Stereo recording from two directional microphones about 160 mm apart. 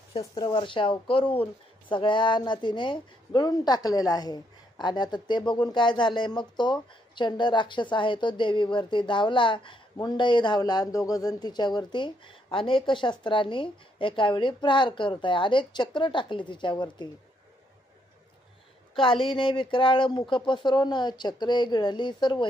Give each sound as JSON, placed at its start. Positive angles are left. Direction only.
{"t": 0.2, "sound": "a woman's voice", "side_deg": 30}
{"t": 18.9, "sound": "a woman's voice", "side_deg": 35}